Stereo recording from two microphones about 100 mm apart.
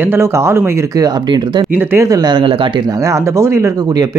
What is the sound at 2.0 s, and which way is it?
Speech, 40° right (ahead or behind).